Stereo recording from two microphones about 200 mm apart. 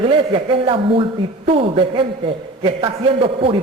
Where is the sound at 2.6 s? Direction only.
25° right (ahead or behind).